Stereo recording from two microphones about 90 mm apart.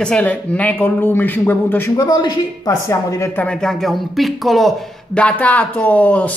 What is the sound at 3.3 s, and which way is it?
Speech, 10° left (ahead or behind).